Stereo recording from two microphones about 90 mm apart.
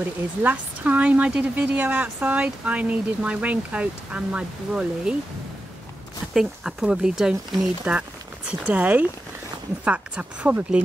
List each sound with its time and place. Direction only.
0.4 s a woman's voice: 20° right (ahead or behind)
6.3 s a woman's voice: 5° right (ahead or behind)